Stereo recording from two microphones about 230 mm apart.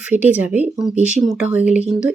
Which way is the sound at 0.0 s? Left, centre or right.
Centre.